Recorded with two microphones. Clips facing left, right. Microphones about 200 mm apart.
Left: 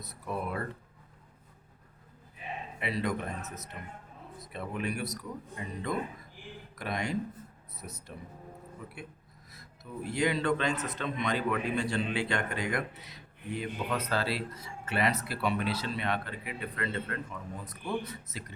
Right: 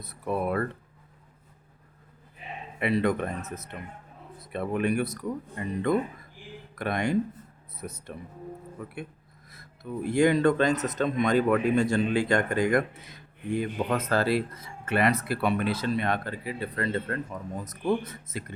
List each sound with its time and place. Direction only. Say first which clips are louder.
0.0 s speech: right 7 dB; 55° right (ahead or behind)
2.8 s speech: right 8 dB; 55° right (ahead or behind)